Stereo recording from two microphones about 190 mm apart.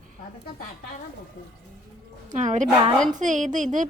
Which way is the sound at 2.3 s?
40° right (ahead or behind).